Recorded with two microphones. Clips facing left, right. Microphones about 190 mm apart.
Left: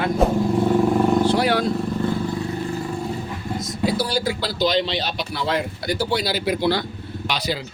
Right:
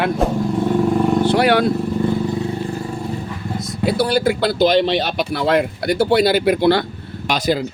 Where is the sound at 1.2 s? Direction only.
65° right (ahead or behind).